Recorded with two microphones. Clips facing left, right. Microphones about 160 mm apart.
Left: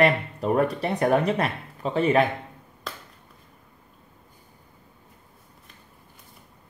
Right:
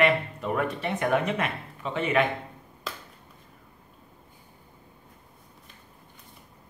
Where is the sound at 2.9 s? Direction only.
Centre (ahead or behind).